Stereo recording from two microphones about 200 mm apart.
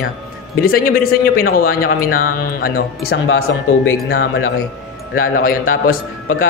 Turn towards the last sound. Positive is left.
turn(degrees=45)  # may be behind; listen again after turning